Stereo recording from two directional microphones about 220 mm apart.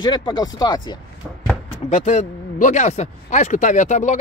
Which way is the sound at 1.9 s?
30° left (ahead or behind).